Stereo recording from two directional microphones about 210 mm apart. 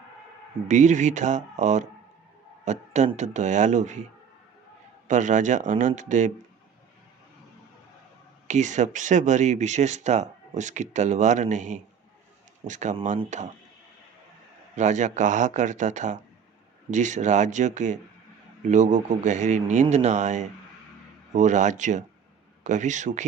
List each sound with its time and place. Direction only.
0.7 s speech: 35° right (ahead or behind)
5.0 s speech: 35° right (ahead or behind)
8.4 s speech: 35° right (ahead or behind)
14.8 s speech: 35° right (ahead or behind)